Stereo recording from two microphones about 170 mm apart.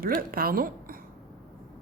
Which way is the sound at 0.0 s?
60° right (ahead or behind).